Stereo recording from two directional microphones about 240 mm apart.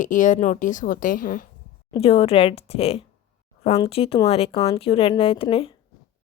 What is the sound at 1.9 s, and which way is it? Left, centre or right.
A woman's voice, left.